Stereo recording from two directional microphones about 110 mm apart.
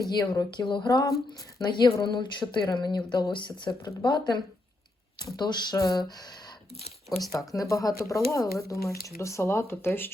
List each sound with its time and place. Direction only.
0.1 s a woman's voice: 40° left (ahead or behind)
5.4 s speech: 35° left (ahead or behind)
7.3 s speech: 30° left (ahead or behind)